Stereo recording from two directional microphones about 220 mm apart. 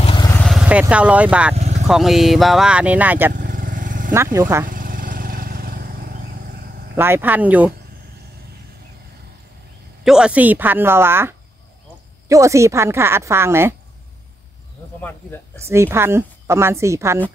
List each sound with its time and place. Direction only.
0.0 s vehicle: 20° left (ahead or behind)
0.5 s speech: 5° right (ahead or behind)
1.5 s vehicle: 30° right (ahead or behind)
1.9 s speech: centre (ahead or behind)
3.3 s vehicle: 40° right (ahead or behind)
4.1 s a woman's voice: 15° right (ahead or behind)
4.6 s vehicle: 40° right (ahead or behind)
7.0 s a woman's voice: 10° right (ahead or behind)
10.0 s a woman's voice: 5° right (ahead or behind)
15.0 s speech: 5° left (ahead or behind)
15.6 s a woman's voice: 10° right (ahead or behind)